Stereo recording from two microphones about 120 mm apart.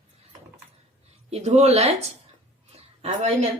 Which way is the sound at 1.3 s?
65° right (ahead or behind).